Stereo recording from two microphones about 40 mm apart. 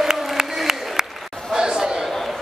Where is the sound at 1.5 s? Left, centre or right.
Centre.